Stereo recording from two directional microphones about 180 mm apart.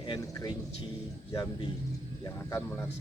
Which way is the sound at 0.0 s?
25° left (ahead or behind).